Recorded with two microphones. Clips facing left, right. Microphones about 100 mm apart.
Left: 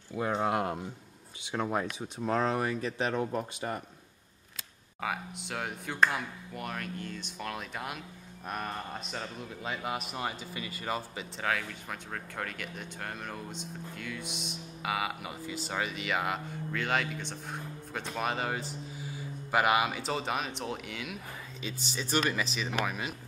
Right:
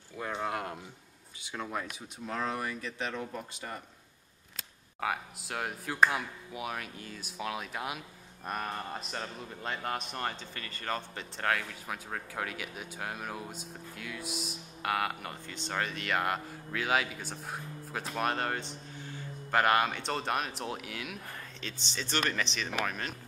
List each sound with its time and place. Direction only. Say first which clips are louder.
0.3 s speech: left 5 dB; 25° left (ahead or behind)
5.0 s a man's voice: right 1 dB; centre (ahead or behind)